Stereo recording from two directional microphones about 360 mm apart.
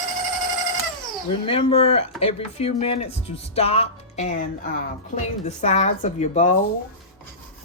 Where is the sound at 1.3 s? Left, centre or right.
Centre.